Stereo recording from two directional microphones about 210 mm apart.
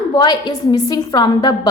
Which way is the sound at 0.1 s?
20° left (ahead or behind).